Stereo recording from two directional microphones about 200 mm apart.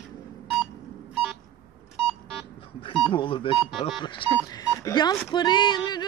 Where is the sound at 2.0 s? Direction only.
5° left (ahead or behind).